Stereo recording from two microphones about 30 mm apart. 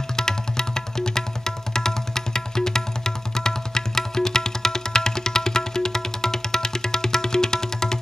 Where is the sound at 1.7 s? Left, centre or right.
Centre.